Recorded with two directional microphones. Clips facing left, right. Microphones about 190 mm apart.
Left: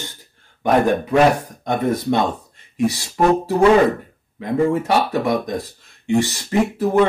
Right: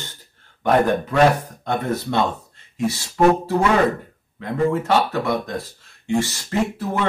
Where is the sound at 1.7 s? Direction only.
15° left (ahead or behind).